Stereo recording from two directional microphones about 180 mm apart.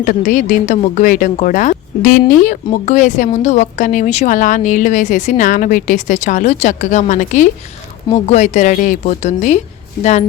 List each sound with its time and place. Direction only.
0.0 s speech: 50° left (ahead or behind)